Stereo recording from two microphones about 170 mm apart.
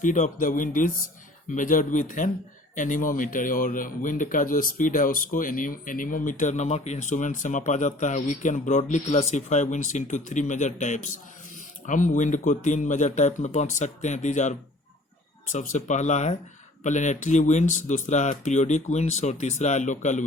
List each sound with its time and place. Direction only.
0.0 s speech: 45° left (ahead or behind)
15.5 s speech: 45° left (ahead or behind)